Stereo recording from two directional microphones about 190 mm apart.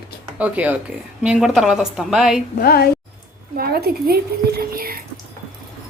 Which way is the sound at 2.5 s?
55° left (ahead or behind).